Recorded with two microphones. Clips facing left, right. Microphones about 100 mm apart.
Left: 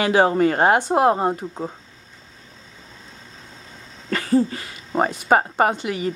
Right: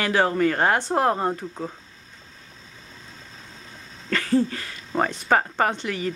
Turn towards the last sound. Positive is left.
turn(degrees=15)  # may be behind; listen again after turning